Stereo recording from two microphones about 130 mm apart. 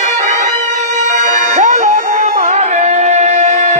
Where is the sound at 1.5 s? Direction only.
65° right (ahead or behind); by 2.3 s 90° right.